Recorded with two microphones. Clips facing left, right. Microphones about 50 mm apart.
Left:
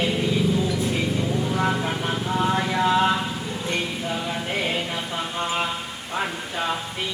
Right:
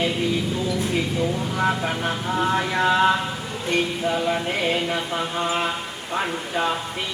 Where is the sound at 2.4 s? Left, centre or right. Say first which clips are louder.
Right 1 dB; centre.